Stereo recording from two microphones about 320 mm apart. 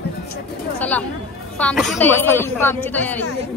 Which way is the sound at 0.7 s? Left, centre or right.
Centre.